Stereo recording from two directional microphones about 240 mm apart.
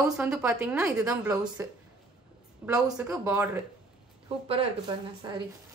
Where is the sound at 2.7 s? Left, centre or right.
Centre.